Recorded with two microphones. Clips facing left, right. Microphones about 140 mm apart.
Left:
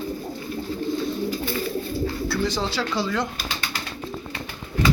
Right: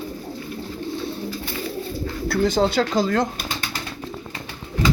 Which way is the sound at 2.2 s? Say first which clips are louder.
Right 10 dB; 50° right (ahead or behind).